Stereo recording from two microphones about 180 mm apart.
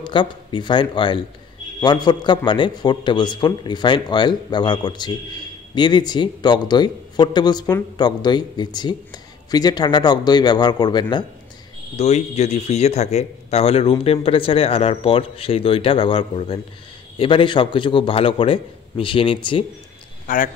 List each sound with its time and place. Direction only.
0.0 s a man's voice: 25° left (ahead or behind)
12.0 s a man's voice: 35° left (ahead or behind)
20.3 s a man's voice: 45° left (ahead or behind)